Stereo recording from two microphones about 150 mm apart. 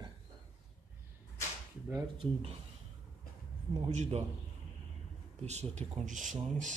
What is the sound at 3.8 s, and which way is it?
Speech, 50° right (ahead or behind).